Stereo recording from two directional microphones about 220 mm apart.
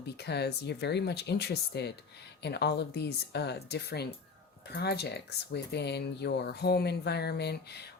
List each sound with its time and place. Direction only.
0.0 s speech: 50° left (ahead or behind)